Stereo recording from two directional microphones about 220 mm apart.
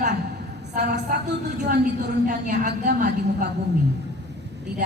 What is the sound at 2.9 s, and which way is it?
Speech, 50° right (ahead or behind).